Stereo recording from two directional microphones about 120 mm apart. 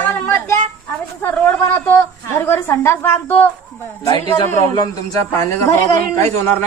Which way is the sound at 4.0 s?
35° left (ahead or behind).